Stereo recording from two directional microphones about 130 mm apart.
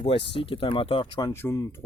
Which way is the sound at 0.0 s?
45° left (ahead or behind).